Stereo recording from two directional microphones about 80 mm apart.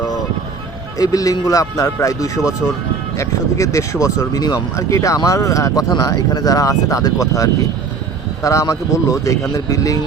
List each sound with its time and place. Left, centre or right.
0.9 s speech: left